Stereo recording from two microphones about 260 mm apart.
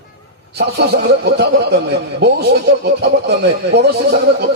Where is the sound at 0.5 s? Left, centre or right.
Right.